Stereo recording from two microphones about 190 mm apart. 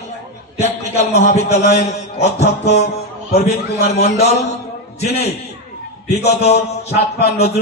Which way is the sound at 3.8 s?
35° left (ahead or behind).